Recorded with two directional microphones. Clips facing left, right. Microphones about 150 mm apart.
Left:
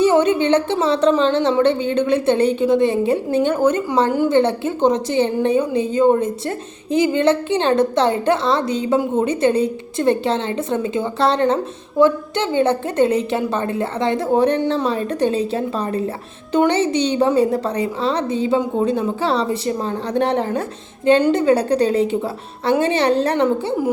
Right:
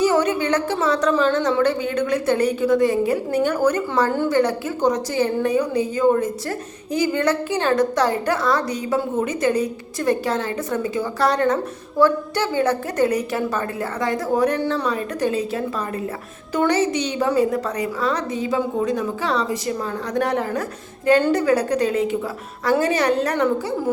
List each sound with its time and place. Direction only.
0.0 s a woman's voice: 25° left (ahead or behind)